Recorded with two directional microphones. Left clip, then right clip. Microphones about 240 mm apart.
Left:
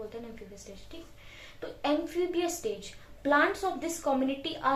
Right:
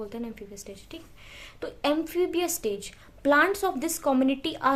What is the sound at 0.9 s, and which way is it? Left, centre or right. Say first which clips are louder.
A woman's voice: right 4 dB; right.